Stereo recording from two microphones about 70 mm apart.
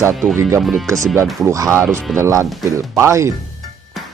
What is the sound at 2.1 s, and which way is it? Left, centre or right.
Speech, centre.